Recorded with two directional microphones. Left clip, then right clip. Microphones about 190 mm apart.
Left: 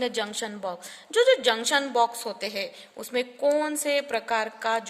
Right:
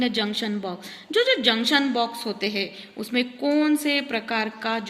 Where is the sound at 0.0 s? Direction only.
55° left (ahead or behind).